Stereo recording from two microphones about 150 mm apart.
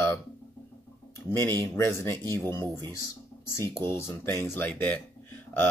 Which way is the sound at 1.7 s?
15° left (ahead or behind).